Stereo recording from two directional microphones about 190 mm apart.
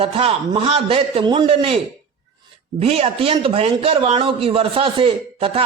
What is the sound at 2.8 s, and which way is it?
A man's voice, 30° right (ahead or behind).